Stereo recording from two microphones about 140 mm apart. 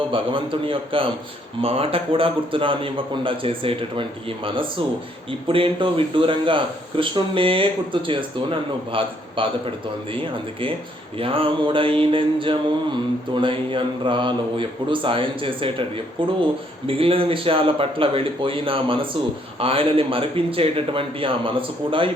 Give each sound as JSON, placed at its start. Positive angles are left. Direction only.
{"t": 0.1, "sound": "speech", "side_deg": -40}
{"t": 11.2, "sound": "speech", "side_deg": -40}